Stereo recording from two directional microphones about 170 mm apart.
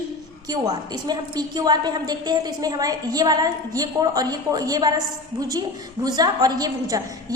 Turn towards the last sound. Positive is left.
turn(degrees=-20)  # may be behind; listen again after turning